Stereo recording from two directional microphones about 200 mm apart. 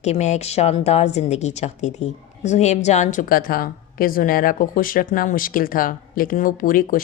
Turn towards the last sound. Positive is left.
turn(degrees=45)  # may be behind; listen again after turning